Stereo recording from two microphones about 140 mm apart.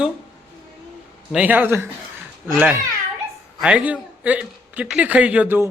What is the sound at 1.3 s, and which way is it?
Speech, 10° right (ahead or behind).